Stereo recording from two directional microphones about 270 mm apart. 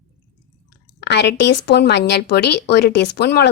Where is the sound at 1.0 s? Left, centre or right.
Left.